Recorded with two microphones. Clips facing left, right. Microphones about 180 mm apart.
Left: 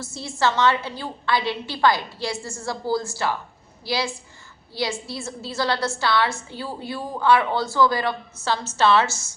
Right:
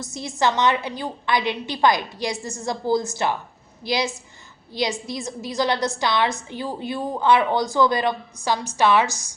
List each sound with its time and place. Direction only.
0.0 s a woman's voice: 20° right (ahead or behind)